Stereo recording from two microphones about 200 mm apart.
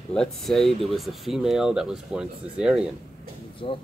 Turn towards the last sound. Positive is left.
turn(degrees=25)  # may be behind; listen again after turning